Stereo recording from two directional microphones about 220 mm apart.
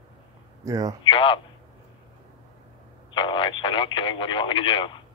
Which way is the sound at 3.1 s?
20° left (ahead or behind).